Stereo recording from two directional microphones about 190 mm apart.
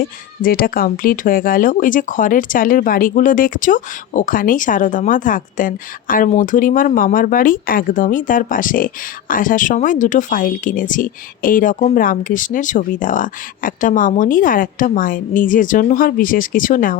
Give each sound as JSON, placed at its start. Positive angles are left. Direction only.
{"t": 0.0, "sound": "speech", "side_deg": 50}